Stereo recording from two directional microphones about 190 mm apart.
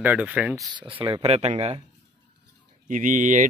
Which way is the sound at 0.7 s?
25° right (ahead or behind).